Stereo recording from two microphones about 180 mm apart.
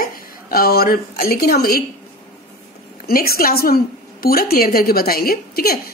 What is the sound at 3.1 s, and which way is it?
A woman's voice, 55° left (ahead or behind).